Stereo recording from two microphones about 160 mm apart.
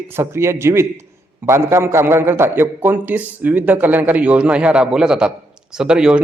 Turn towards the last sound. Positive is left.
turn(degrees=-5)  # may be behind; listen again after turning